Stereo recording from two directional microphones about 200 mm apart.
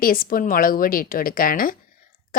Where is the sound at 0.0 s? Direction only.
45° left (ahead or behind).